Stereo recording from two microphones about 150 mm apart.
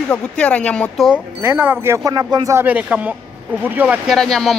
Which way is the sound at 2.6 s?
10° right (ahead or behind).